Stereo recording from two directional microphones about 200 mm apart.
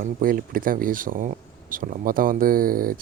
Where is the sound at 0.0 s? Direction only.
45° right (ahead or behind).